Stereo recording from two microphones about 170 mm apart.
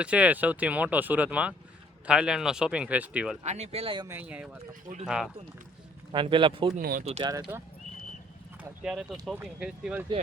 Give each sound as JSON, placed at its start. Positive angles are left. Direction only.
{"t": 0.0, "sound": "speech", "side_deg": -5}
{"t": 3.4, "sound": "speech", "side_deg": -40}
{"t": 4.0, "sound": "speech", "side_deg": -10}
{"t": 4.7, "sound": "speech", "side_deg": -45}
{"t": 5.0, "sound": "speech", "side_deg": -5}
{"t": 6.1, "sound": "speech", "side_deg": -30}
{"t": 6.7, "sound": "speech", "side_deg": -60}
{"t": 7.2, "sound": "speech", "side_deg": -25}
{"t": 8.8, "sound": "speech", "side_deg": 0}